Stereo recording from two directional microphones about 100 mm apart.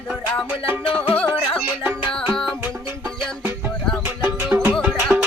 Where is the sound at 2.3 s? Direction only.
5° left (ahead or behind).